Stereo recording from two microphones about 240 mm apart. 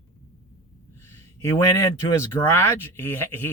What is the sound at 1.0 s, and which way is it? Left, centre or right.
Speech, centre.